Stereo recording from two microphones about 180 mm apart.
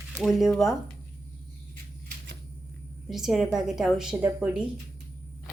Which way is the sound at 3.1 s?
Centre (ahead or behind).